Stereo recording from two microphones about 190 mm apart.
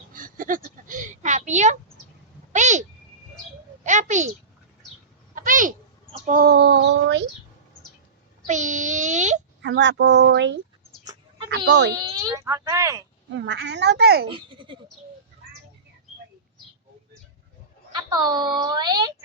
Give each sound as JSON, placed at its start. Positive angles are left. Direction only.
{"t": 0.1, "sound": "a sound", "side_deg": -45}
{"t": 3.8, "sound": "a sound", "side_deg": -40}
{"t": 5.3, "sound": "a sound", "side_deg": -45}
{"t": 6.1, "sound": "speech", "side_deg": -45}
{"t": 8.4, "sound": "speech", "side_deg": -40}
{"t": 9.6, "sound": "a child's voice", "side_deg": -70}
{"t": 11.9, "sound": "speech", "side_deg": -20}
{"t": 13.3, "sound": "speech", "side_deg": -65}
{"t": 14.3, "sound": "a child's voice", "side_deg": -25}
{"t": 17.9, "sound": "speech", "side_deg": -20}